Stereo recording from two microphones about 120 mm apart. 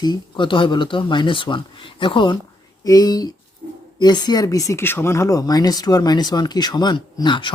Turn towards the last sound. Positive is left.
turn(degrees=40)  # may be behind; listen again after turning